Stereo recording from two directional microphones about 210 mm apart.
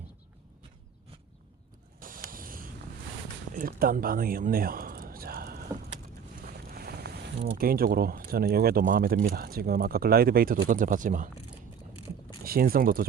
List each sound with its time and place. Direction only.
2.0 s a sound: 40° right (ahead or behind)
2.3 s vehicle: 40° right (ahead or behind)
3.5 s a sound: 40° right (ahead or behind)
6.4 s boat: 45° right (ahead or behind)
7.5 s speech: 45° right (ahead or behind)
12.4 s speech: 45° right (ahead or behind)